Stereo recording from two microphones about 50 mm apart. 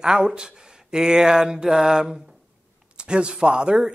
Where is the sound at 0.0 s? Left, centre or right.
Centre.